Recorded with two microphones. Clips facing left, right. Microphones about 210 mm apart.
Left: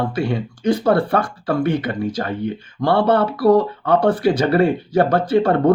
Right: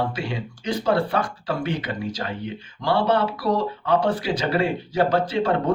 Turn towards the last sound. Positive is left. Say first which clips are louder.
# left 7 dB
turn(degrees=55)  # may be behind; listen again after turning